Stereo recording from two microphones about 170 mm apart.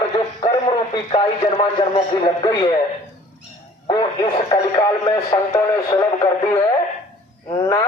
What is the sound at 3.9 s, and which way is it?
Speech, 25° left (ahead or behind).